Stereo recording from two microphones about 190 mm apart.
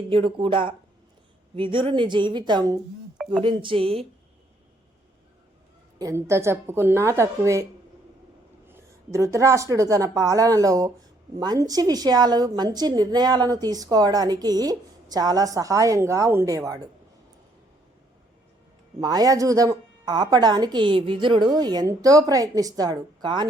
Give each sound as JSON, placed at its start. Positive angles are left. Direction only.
{"t": 0.1, "sound": "a woman's voice", "side_deg": -30}
{"t": 6.0, "sound": "a woman's voice", "side_deg": -15}
{"t": 18.9, "sound": "a woman's voice", "side_deg": -20}